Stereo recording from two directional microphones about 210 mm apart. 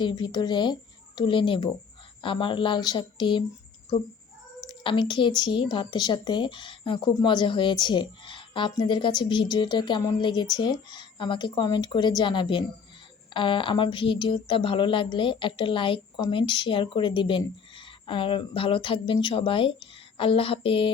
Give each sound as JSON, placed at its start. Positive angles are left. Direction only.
{"t": 0.0, "sound": "speech", "side_deg": 20}
{"t": 4.6, "sound": "speech", "side_deg": 20}